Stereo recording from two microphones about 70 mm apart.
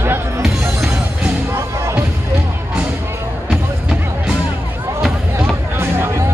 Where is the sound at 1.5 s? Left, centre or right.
Right.